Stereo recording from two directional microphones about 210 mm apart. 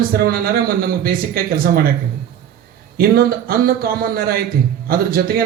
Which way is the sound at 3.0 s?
45° right (ahead or behind).